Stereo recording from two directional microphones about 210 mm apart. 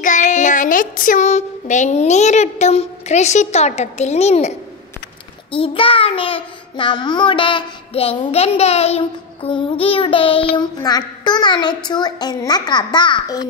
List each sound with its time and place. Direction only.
0.0 s speech: 35° left (ahead or behind)
5.5 s child singing: 25° left (ahead or behind)